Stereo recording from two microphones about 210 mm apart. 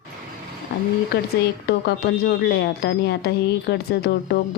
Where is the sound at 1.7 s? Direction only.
50° left (ahead or behind).